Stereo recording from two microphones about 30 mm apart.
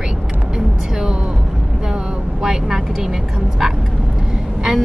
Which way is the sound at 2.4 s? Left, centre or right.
Centre.